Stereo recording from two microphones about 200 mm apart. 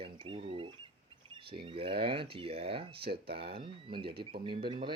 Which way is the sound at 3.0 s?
50° right (ahead or behind).